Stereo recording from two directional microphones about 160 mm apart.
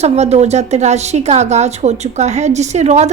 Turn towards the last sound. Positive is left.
turn(degrees=-45)  # may be behind; listen again after turning